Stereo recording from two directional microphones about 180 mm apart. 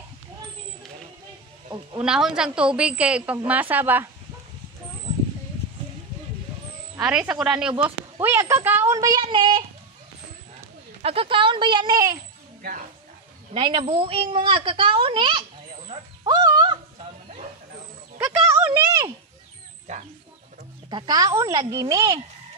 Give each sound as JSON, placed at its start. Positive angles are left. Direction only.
{"t": 2.0, "sound": "a woman's voice", "side_deg": -5}
{"t": 7.0, "sound": "a woman's voice", "side_deg": -5}
{"t": 11.0, "sound": "a child's voice", "side_deg": -30}
{"t": 13.5, "sound": "a child's voice", "side_deg": -25}
{"t": 16.3, "sound": "a sound", "side_deg": -25}
{"t": 18.1, "sound": "a sound", "side_deg": -15}
{"t": 20.9, "sound": "a child's voice", "side_deg": -25}